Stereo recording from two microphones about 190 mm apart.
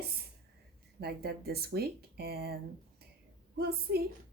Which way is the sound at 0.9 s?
55° right (ahead or behind).